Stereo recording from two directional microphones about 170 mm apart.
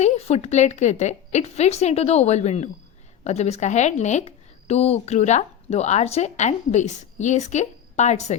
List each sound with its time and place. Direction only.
0.0 s a woman's voice: 40° left (ahead or behind)